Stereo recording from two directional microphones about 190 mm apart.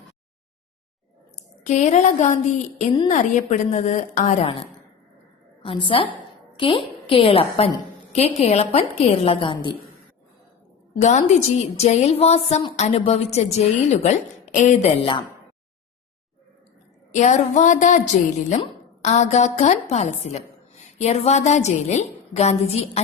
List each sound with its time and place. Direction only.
1.6 s a woman's voice: 35° left (ahead or behind)
5.6 s a woman's voice: 30° left (ahead or behind)
10.9 s a woman's voice: 40° left (ahead or behind)
17.1 s a woman's voice: 40° left (ahead or behind)